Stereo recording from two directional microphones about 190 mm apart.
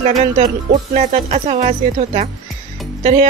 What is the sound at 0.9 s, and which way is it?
Speech, 35° right (ahead or behind).